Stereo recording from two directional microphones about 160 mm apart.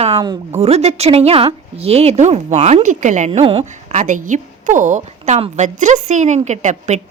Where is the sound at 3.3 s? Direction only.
35° right (ahead or behind).